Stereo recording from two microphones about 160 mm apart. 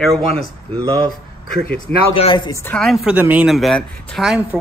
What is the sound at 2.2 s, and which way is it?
Speech, 35° left (ahead or behind).